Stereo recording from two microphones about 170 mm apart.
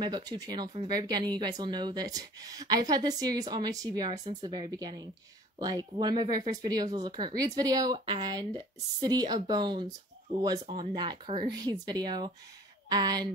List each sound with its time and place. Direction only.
0.0 s speech: 25° right (ahead or behind)